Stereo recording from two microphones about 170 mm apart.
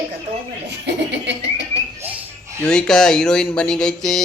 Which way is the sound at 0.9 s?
90° right.